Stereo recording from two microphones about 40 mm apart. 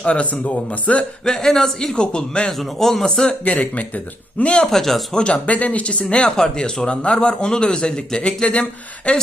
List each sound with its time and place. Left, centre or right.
0.0 s speech: left
1.2 s a man's voice: centre
2.0 s a man's voice: left
2.5 s a man's voice: centre
3.6 s speech: left
4.7 s a man's voice: centre
5.1 s a man's voice: left